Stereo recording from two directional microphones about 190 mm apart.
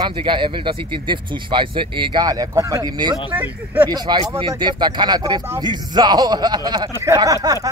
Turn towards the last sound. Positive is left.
turn(degrees=-15)  # may be behind; listen again after turning